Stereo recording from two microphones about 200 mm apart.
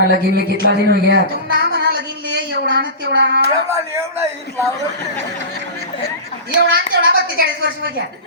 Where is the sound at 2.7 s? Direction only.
55° right (ahead or behind).